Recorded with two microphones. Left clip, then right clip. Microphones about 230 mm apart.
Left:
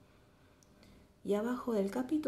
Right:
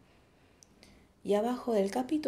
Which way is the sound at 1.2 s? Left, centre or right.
Centre.